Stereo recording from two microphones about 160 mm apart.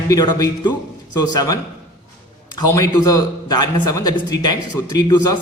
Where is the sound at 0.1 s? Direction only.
25° left (ahead or behind).